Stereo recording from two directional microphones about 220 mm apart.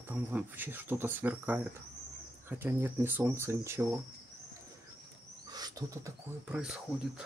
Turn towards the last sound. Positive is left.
turn(degrees=-5)  # may be behind; listen again after turning